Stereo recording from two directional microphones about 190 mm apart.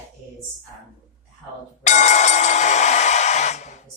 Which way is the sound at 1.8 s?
40° left (ahead or behind).